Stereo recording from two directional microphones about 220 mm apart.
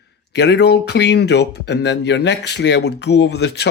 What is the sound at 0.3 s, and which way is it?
Speech, 50° left (ahead or behind).